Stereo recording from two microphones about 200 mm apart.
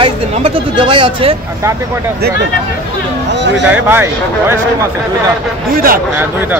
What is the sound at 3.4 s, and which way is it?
Speech, 60° right (ahead or behind).